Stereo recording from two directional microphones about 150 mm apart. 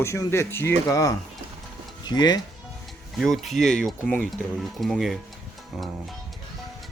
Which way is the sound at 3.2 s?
Centre (ahead or behind).